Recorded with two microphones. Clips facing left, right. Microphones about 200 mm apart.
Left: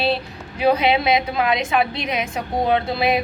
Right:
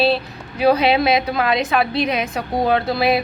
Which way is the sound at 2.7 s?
20° left (ahead or behind).